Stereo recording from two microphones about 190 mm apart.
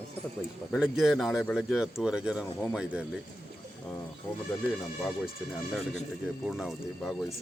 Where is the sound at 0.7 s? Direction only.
Centre (ahead or behind).